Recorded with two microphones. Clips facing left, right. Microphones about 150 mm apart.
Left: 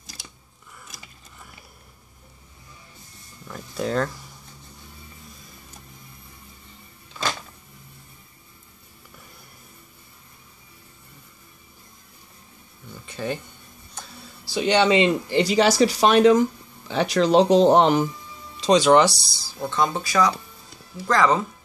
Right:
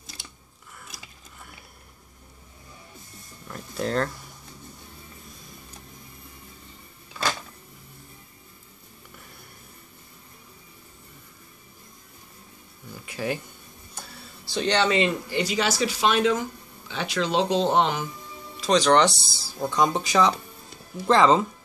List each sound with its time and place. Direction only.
0.0 s scissors: centre (ahead or behind)
0.8 s a sound: centre (ahead or behind)
3.4 s speech: centre (ahead or behind)
13.0 s a sound: 5° right (ahead or behind)
14.4 s speech: 10° left (ahead or behind)
15.4 s speech: 35° left (ahead or behind)
18.7 s speech: 10° left (ahead or behind)
19.6 s speech: 10° right (ahead or behind)